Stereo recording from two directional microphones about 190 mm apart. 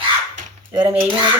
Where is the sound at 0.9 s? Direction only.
10° right (ahead or behind).